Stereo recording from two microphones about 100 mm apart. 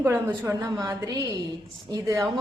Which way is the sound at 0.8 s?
35° right (ahead or behind).